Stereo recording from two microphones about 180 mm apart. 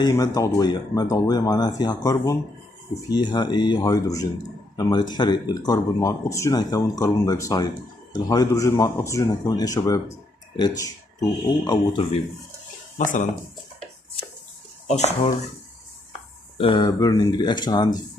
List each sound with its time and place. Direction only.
0.0 s speech: 20° left (ahead or behind)
12.9 s speech: 45° left (ahead or behind)
14.9 s speech: 40° left (ahead or behind)
16.5 s speech: 25° left (ahead or behind)